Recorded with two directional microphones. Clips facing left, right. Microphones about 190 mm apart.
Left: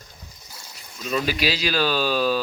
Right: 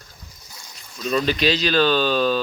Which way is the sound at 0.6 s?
10° left (ahead or behind).